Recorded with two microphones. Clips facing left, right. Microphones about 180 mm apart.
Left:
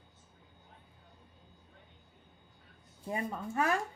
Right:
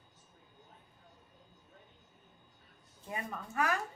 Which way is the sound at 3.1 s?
30° left (ahead or behind).